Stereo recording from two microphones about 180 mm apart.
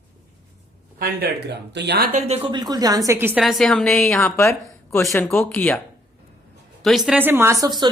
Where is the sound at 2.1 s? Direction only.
35° right (ahead or behind); by 3.4 s 10° right (ahead or behind).